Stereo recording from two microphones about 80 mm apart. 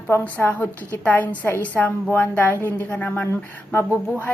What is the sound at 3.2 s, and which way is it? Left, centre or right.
A woman's voice, left.